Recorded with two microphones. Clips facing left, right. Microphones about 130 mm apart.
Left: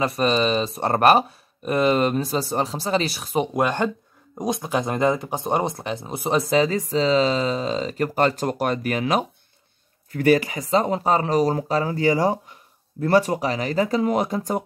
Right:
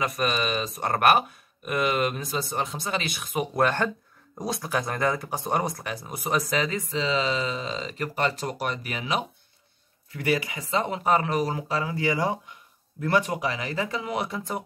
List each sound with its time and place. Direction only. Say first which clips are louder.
0.0 s speech: left 6 dB; 30° left (ahead or behind)
3.5 s speech: left 2 dB; 15° left (ahead or behind); by 14.6 s 45° left (ahead or behind)